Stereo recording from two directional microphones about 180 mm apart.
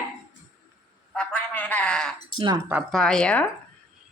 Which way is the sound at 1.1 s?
5° left (ahead or behind).